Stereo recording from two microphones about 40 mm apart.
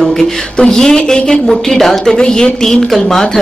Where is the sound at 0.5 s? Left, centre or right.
Centre.